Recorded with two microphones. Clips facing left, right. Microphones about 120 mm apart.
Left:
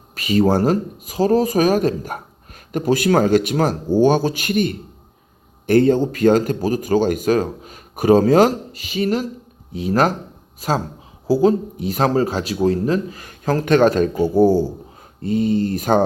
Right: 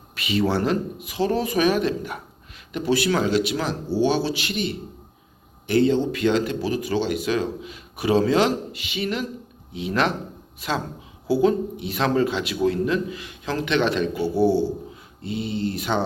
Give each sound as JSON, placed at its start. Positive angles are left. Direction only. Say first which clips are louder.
{"t": 0.2, "sound": "a man's voice", "louder": "left 6 dB", "side_deg": 40}